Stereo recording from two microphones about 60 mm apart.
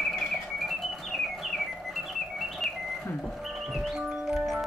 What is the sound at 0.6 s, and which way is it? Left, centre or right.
Music, centre.